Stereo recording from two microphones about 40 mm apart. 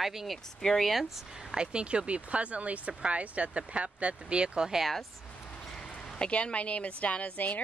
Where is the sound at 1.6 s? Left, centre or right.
Right.